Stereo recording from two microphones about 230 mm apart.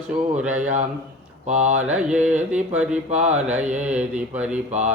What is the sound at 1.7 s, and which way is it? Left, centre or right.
Mantra, centre.